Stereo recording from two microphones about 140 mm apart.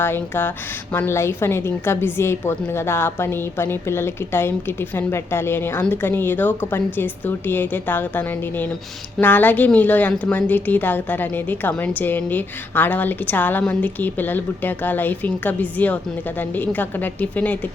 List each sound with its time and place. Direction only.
0.0 s a woman's voice: 15° left (ahead or behind)